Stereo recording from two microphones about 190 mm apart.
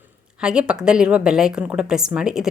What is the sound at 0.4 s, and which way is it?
Speech, 5° right (ahead or behind).